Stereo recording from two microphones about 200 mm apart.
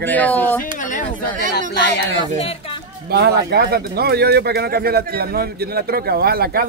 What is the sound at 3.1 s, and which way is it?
Speech, 55° right (ahead or behind).